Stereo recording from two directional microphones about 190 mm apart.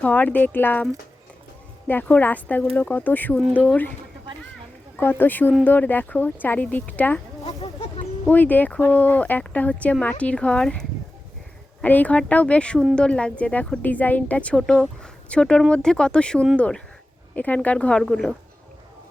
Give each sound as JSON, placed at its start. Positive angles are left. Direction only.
{"t": 0.0, "sound": "speech", "side_deg": 10}
{"t": 4.9, "sound": "speech", "side_deg": 10}
{"t": 7.4, "sound": "a sound", "side_deg": 30}
{"t": 8.3, "sound": "speech", "side_deg": 10}